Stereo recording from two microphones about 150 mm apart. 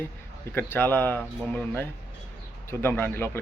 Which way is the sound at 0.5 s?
15° left (ahead or behind).